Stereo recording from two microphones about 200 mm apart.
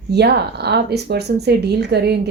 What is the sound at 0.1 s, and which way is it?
Speech, 55° right (ahead or behind).